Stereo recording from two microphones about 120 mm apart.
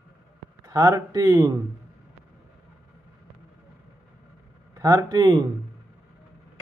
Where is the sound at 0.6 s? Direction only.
25° right (ahead or behind).